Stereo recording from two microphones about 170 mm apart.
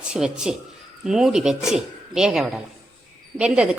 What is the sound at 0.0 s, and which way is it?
Speech, 5° right (ahead or behind).